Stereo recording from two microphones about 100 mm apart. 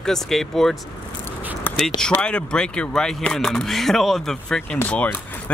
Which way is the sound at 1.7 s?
15° left (ahead or behind).